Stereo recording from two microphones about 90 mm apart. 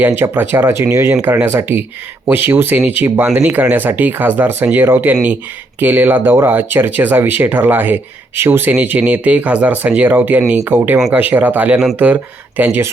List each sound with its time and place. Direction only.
0.0 s speech: 25° right (ahead or behind)